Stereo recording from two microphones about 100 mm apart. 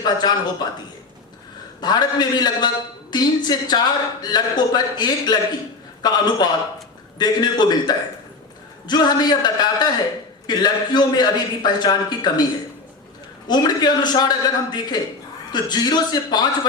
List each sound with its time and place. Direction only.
0.0 s a man's voice: 45° left (ahead or behind)
1.8 s a man's voice: 45° left (ahead or behind)
13.5 s a man's voice: 45° left (ahead or behind)